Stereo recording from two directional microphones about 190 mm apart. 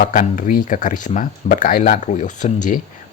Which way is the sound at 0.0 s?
45° left (ahead or behind).